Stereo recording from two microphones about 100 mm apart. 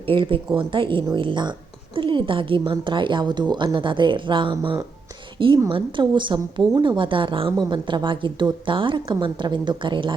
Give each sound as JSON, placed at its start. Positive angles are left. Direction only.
{"t": 0.1, "sound": "a woman's voice", "side_deg": -60}